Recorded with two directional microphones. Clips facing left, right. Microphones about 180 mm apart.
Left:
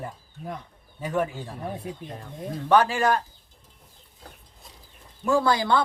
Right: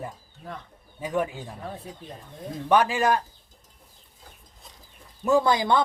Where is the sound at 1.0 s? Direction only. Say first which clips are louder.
Even; 15° right (ahead or behind).